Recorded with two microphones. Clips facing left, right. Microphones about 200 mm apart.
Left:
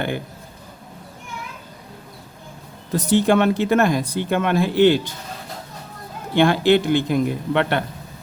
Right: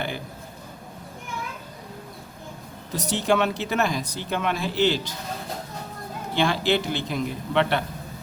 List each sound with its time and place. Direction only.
2.9 s speech: 55° left (ahead or behind)
6.3 s speech: 55° left (ahead or behind)